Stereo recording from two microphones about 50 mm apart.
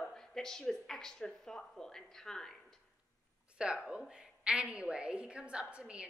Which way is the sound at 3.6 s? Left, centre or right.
Centre.